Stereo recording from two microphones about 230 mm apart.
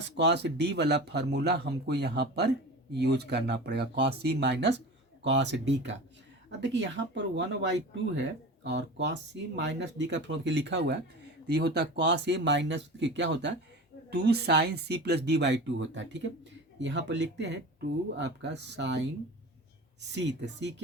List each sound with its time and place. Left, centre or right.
0.0 s speech: right
8.6 s speech: right